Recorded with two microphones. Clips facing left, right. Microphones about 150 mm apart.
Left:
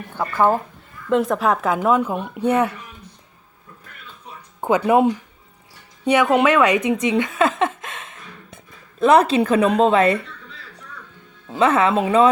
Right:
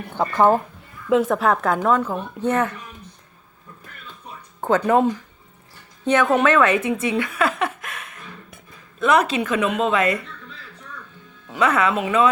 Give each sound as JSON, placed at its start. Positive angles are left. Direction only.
{"t": 0.1, "sound": "speech", "side_deg": -15}
{"t": 1.1, "sound": "a woman's voice", "side_deg": 0}
{"t": 4.6, "sound": "a woman's voice", "side_deg": 10}
{"t": 11.4, "sound": "speech", "side_deg": 25}